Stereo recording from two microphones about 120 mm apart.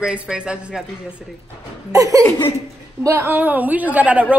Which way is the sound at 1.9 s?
30° right (ahead or behind).